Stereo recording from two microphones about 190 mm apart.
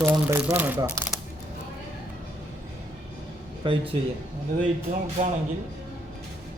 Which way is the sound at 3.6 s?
30° right (ahead or behind).